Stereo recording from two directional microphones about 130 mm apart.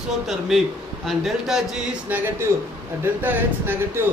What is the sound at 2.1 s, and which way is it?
Speech, 15° right (ahead or behind).